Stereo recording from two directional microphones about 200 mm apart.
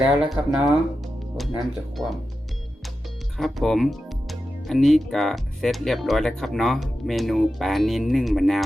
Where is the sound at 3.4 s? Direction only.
Centre (ahead or behind).